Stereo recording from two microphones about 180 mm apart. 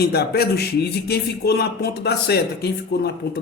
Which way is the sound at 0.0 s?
60° left (ahead or behind).